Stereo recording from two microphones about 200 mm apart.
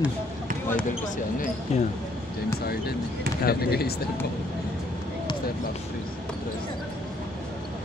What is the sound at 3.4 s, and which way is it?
Speech, 50° left (ahead or behind).